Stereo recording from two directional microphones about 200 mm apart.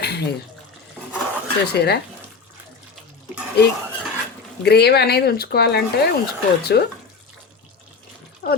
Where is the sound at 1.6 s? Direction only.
55° left (ahead or behind).